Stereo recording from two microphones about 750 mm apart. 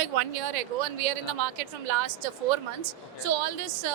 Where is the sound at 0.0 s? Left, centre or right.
Right.